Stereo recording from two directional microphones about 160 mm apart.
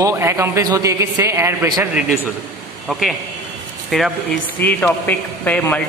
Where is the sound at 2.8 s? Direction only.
Centre (ahead or behind).